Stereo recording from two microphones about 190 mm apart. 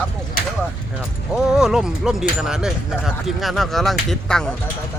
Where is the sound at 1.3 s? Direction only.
5° right (ahead or behind).